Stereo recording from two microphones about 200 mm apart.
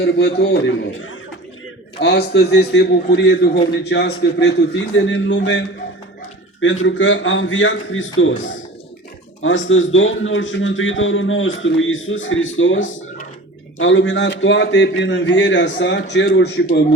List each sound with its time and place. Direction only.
0.0 s a man's voice: 55° left (ahead or behind)
2.0 s a man's voice: 55° left (ahead or behind)
6.8 s a man's voice: 70° left (ahead or behind)